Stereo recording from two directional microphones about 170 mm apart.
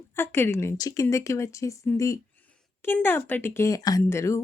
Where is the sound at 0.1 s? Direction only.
15° left (ahead or behind).